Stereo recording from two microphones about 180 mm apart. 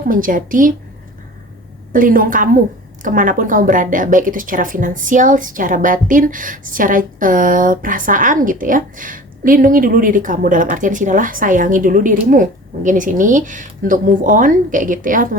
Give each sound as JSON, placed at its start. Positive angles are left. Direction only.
{"t": 0.1, "sound": "a woman's voice", "side_deg": -50}
{"t": 1.9, "sound": "a woman's voice", "side_deg": -50}